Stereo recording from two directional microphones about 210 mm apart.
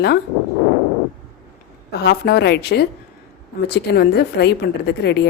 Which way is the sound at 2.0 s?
50° left (ahead or behind).